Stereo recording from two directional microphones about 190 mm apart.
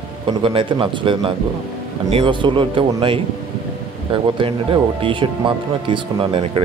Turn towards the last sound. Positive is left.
turn(degrees=-30)  # may be behind; listen again after turning